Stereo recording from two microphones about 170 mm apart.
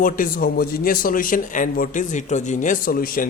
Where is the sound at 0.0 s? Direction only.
55° left (ahead or behind).